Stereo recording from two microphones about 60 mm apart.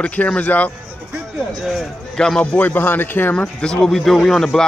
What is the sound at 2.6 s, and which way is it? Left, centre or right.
Speech, left.